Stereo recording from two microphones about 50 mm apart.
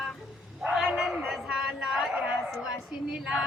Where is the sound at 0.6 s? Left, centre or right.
Centre.